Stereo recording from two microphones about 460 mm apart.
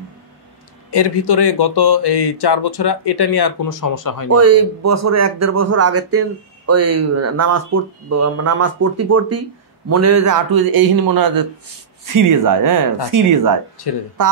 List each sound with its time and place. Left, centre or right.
0.9 s speech: left
4.3 s speech: right